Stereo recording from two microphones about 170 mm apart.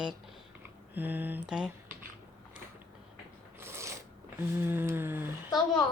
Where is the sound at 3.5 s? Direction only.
15° right (ahead or behind).